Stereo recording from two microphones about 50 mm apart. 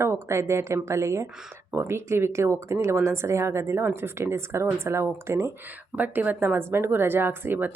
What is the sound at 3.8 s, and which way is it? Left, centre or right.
Speech, right.